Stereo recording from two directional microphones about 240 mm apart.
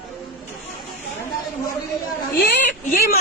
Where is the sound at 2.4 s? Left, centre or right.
Left.